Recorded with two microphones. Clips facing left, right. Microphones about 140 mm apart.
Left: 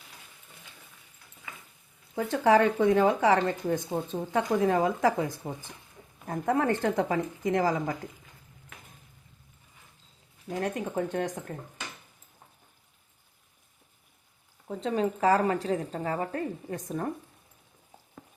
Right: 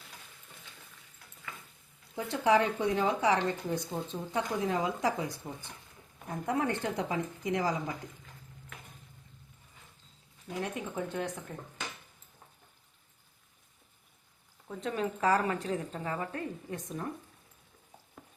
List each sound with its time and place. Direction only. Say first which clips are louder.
2.1 s speech: left 4 dB; 50° left (ahead or behind)
10.6 s speech: left 5 dB; 50° left (ahead or behind)
14.7 s a woman's voice: left 5 dB; 35° left (ahead or behind)